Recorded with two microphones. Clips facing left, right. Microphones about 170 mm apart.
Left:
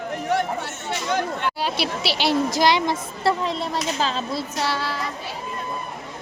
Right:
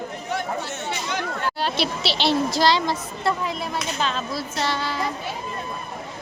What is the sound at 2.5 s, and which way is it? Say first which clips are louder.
Speech: left 1 dB; 20° left (ahead or behind).